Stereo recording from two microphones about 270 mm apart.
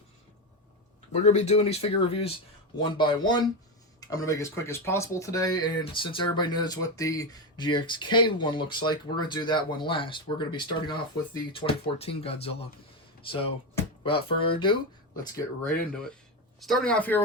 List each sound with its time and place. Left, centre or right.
1.1 s speech: left
13.2 s music: centre
14.4 s speech: centre
15.8 s speech: centre